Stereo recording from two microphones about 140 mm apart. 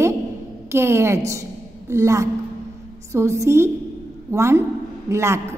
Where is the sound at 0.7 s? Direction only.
20° right (ahead or behind).